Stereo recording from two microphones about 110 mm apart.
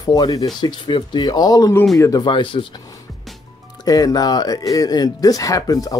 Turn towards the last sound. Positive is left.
turn(degrees=35)  # may be behind; listen again after turning